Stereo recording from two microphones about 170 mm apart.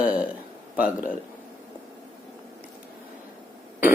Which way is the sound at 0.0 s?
5° right (ahead or behind).